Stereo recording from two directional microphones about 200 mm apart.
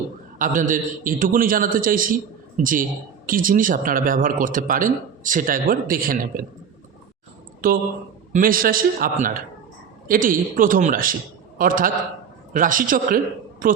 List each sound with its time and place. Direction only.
0.3 s speech: 40° right (ahead or behind)
3.2 s speech: 45° right (ahead or behind)
7.6 s speech: 45° right (ahead or behind)